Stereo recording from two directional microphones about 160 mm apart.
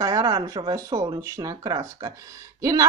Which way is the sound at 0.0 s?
25° right (ahead or behind).